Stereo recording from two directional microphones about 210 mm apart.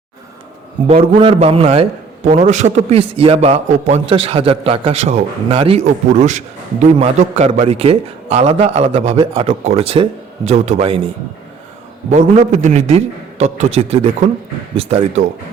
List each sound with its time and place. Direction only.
0.9 s a man's voice: 25° right (ahead or behind)
12.1 s a man's voice: 35° right (ahead or behind)